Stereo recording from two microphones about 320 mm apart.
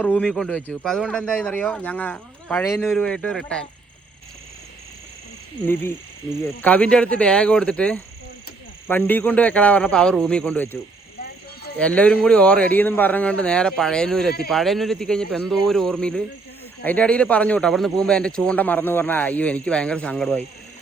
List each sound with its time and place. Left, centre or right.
0.0 s speech: centre
5.6 s speech: centre
11.8 s speech: centre